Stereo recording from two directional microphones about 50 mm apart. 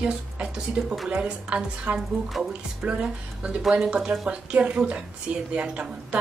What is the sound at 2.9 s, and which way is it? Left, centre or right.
A woman's voice, right.